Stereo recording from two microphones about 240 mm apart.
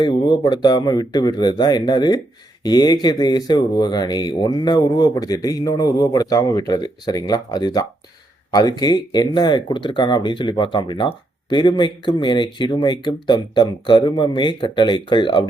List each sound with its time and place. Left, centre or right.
0.0 s speech: centre